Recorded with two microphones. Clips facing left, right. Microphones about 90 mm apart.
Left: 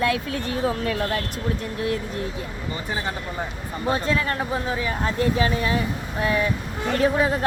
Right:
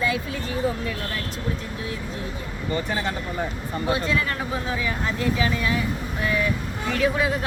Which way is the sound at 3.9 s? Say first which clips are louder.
Left 2 dB; 35° left (ahead or behind).